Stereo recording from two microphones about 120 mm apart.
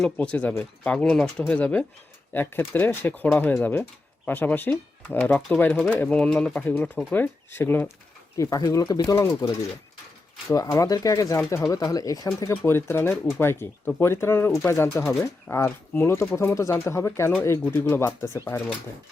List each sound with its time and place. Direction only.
0.0 s speech: 10° left (ahead or behind)